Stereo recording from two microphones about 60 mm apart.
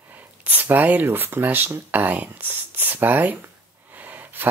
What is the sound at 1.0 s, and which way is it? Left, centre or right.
Speech, right.